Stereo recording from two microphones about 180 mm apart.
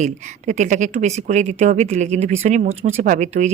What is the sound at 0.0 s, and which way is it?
Speech, 40° right (ahead or behind).